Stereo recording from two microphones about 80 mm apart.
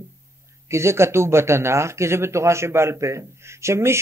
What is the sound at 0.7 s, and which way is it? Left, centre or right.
Speech, right.